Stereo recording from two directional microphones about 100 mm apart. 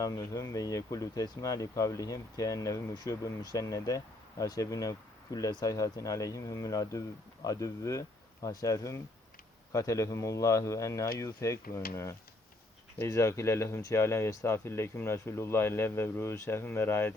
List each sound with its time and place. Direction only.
0.0 s speech: 35° left (ahead or behind)